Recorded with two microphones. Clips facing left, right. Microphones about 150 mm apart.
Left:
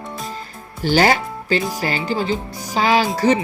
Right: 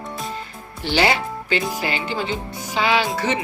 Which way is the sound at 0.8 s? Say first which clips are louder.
Left 4 dB; 45° left (ahead or behind).